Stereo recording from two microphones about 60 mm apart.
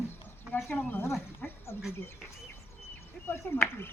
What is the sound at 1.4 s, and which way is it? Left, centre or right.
Speech, left.